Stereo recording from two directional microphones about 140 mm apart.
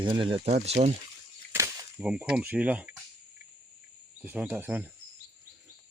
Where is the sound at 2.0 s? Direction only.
10° right (ahead or behind).